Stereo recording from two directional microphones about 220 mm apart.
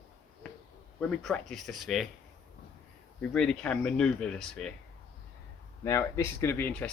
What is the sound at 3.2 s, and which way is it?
Speech, 5° left (ahead or behind).